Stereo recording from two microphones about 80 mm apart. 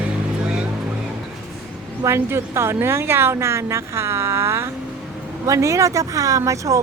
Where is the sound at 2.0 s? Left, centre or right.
Right.